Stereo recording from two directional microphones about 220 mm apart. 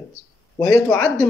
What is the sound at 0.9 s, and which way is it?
Speech, 5° left (ahead or behind).